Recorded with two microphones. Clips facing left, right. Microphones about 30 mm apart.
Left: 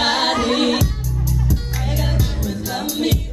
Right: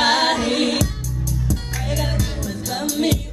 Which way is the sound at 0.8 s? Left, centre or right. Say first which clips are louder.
Left 1 dB; left.